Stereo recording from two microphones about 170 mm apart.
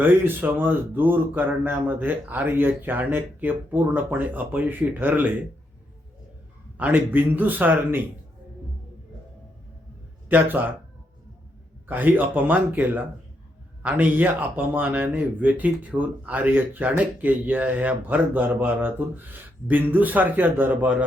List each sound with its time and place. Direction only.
0.0 s speech: 10° right (ahead or behind)
6.7 s speech: 10° right (ahead or behind)
10.2 s speech: 10° right (ahead or behind)
11.9 s speech: 10° right (ahead or behind)